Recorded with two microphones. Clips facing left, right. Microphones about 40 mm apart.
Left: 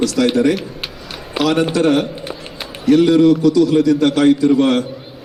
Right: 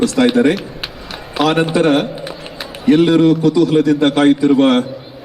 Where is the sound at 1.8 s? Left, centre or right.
Centre.